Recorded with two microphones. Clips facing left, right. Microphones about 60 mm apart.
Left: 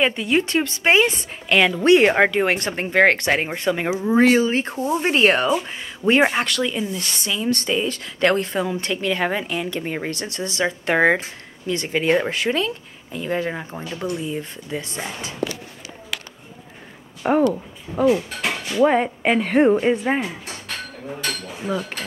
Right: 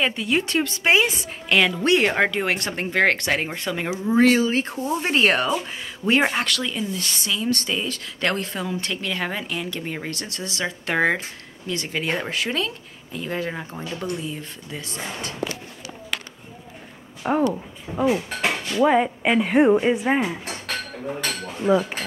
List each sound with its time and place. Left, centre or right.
0.0 s a woman's voice: centre
17.2 s speech: left
18.0 s speech: centre
18.7 s speech: centre
19.4 s a woman's voice: centre
21.6 s speech: centre